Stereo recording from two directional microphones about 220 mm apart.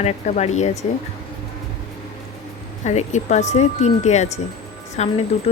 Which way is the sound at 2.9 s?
30° left (ahead or behind).